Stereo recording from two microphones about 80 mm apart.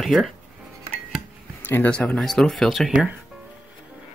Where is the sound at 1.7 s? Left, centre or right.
Centre.